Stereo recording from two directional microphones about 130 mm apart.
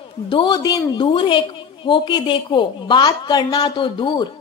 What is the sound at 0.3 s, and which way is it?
Speech, 35° left (ahead or behind).